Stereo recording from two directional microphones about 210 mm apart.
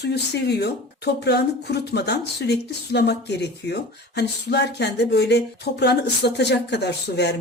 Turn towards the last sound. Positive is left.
turn(degrees=55)  # may be behind; listen again after turning